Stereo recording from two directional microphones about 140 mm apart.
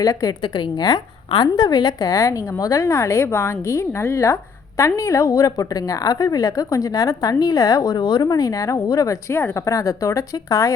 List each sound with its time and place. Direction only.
0.0 s a woman's voice: 25° left (ahead or behind)